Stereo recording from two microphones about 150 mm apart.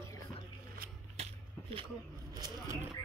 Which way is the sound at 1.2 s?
45° right (ahead or behind).